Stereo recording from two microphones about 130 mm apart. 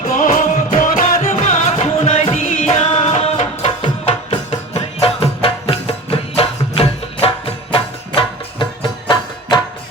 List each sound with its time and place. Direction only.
0.1 s music: 90° left
2.8 s music: 50° left (ahead or behind)